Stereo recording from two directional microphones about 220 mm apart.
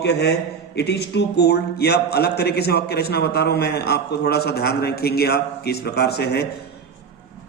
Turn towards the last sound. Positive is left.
turn(degrees=50)  # may be behind; listen again after turning